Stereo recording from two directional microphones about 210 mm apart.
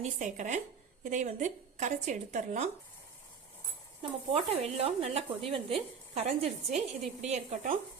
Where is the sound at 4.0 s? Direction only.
30° right (ahead or behind).